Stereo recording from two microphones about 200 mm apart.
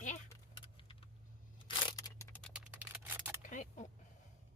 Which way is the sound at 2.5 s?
10° right (ahead or behind).